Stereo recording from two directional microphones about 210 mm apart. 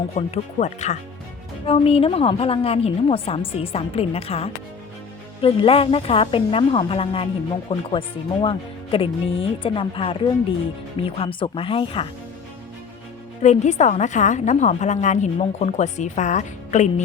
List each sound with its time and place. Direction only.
0.2 s a woman's voice: 30° left (ahead or behind)
13.4 s a woman's voice: 35° left (ahead or behind)